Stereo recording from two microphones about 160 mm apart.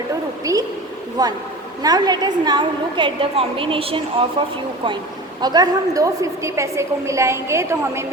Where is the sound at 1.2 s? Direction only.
25° right (ahead or behind).